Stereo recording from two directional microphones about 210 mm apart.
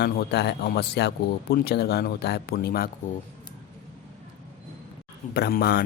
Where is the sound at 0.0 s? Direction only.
50° left (ahead or behind).